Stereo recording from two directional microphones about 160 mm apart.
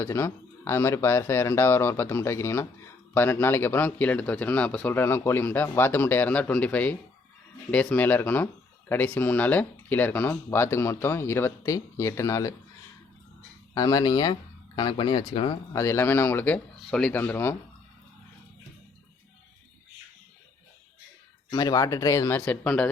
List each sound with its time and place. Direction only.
0.0 s a man's voice: 15° left (ahead or behind)
13.7 s speech: 25° left (ahead or behind)
15.7 s a man's voice: 20° left (ahead or behind)
21.5 s speech: 20° left (ahead or behind)